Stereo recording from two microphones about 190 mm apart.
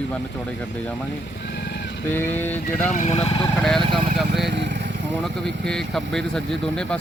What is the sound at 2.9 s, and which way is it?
Speech, 35° left (ahead or behind).